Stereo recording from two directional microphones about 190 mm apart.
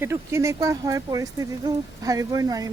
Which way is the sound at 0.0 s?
15° right (ahead or behind).